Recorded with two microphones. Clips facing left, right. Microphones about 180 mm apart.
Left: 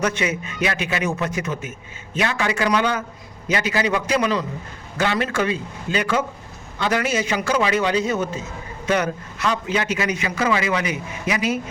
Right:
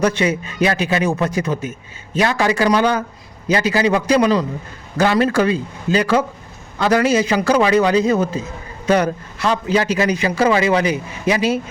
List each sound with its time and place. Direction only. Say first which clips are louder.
0.0 s a man's voice: right 5 dB; 35° right (ahead or behind)